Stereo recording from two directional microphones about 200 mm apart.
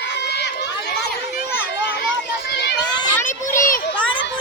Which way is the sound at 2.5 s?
55° left (ahead or behind).